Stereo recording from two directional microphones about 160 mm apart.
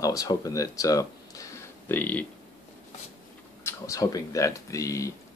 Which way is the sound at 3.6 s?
20° left (ahead or behind).